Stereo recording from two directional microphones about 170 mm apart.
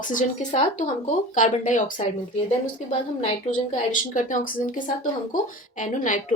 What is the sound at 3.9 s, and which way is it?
Speech, 50° left (ahead or behind).